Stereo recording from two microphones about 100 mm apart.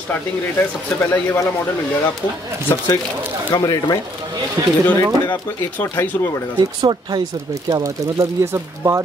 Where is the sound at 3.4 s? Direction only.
40° left (ahead or behind).